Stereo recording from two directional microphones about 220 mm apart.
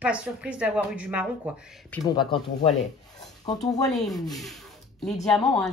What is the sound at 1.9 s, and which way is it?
Speech, 20° left (ahead or behind).